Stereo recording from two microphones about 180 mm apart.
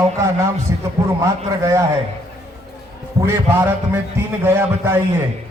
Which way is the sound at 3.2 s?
10° right (ahead or behind).